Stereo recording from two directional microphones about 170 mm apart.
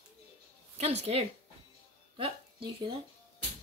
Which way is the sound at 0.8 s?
40° right (ahead or behind).